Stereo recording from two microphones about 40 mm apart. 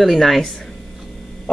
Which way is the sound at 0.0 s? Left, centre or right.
Centre.